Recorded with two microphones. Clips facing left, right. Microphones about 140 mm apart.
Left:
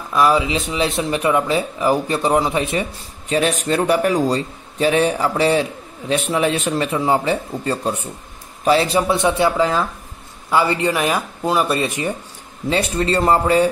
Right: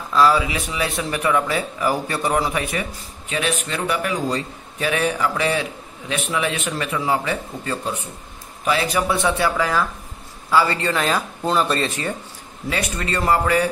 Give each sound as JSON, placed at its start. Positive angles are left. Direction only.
{"t": 0.1, "sound": "a man's voice", "side_deg": 20}
{"t": 9.1, "sound": "speech", "side_deg": 20}
{"t": 12.6, "sound": "speech", "side_deg": 30}